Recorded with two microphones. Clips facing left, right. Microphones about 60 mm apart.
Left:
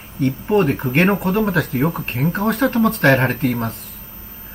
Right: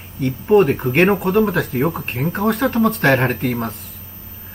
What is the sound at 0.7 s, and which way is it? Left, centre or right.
Speech, centre.